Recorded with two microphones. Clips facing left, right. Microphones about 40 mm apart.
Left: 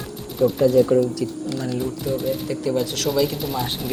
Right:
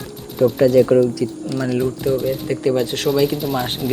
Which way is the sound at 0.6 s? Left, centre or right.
Right.